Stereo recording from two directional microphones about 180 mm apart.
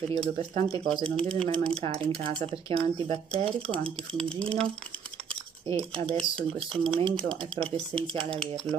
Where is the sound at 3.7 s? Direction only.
5° left (ahead or behind).